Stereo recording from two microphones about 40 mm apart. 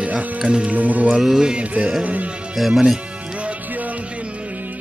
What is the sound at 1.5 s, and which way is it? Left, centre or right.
Speech, right.